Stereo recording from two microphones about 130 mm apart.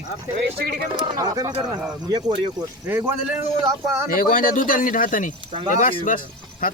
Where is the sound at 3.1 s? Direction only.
20° right (ahead or behind).